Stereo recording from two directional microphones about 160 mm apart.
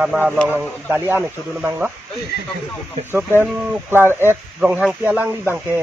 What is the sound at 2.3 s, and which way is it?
Speech, 75° left (ahead or behind).